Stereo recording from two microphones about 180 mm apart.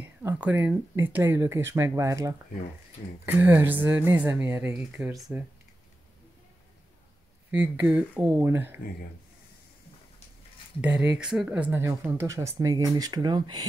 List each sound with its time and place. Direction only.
0.0 s speech: 10° right (ahead or behind)
7.5 s speech: 10° right (ahead or behind)
10.8 s speech: 5° right (ahead or behind); by 13.7 s 25° right (ahead or behind)